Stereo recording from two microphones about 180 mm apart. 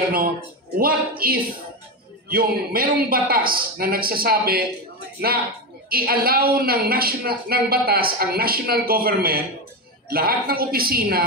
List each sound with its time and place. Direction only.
0.7 s a woman's voice: 55° right (ahead or behind)
5.9 s a woman's voice: 55° right (ahead or behind)